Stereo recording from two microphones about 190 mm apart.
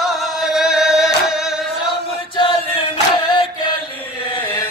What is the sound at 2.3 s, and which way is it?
Chant, 25° left (ahead or behind).